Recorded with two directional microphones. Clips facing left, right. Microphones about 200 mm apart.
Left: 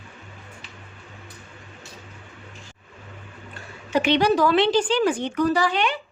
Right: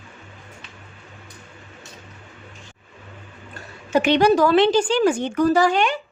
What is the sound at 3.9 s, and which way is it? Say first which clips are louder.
Speech: right 3 dB; 50° right (ahead or behind).